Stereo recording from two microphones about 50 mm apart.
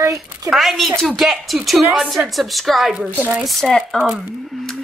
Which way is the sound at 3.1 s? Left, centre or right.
Right.